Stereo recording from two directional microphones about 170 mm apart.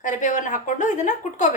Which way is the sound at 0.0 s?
45° left (ahead or behind).